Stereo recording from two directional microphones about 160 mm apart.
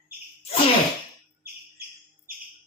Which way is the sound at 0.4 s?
35° left (ahead or behind).